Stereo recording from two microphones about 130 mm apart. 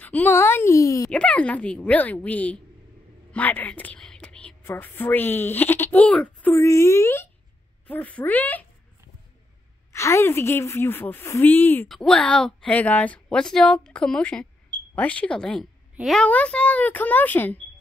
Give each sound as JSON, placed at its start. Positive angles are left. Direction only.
{"t": 0.0, "sound": "speech", "side_deg": 15}
{"t": 1.1, "sound": "a woman's voice", "side_deg": 10}
{"t": 6.5, "sound": "speech", "side_deg": 20}
{"t": 7.8, "sound": "speech", "side_deg": 10}
{"t": 9.9, "sound": "speech", "side_deg": 20}